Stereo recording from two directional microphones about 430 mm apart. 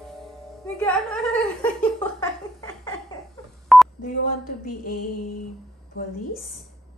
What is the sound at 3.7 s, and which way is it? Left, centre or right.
Telephone dialing, centre.